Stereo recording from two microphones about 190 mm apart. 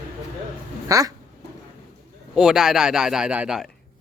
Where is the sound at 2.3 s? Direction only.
5° right (ahead or behind).